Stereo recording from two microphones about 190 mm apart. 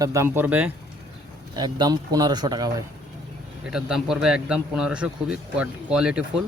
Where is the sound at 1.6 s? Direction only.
20° right (ahead or behind).